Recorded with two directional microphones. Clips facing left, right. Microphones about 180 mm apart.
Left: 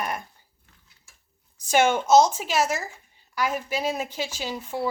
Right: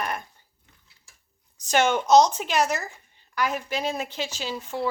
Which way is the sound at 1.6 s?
10° left (ahead or behind).